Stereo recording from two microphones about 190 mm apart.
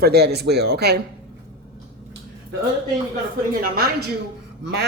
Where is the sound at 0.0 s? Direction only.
55° right (ahead or behind).